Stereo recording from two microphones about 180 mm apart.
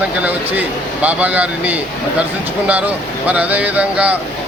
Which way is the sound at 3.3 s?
10° right (ahead or behind).